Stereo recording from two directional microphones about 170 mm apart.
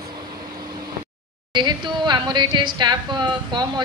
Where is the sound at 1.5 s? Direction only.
25° right (ahead or behind).